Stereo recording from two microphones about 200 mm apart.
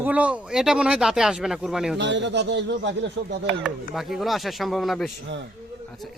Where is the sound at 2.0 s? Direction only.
60° right (ahead or behind).